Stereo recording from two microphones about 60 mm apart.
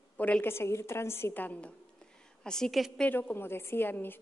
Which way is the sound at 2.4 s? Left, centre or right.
Centre.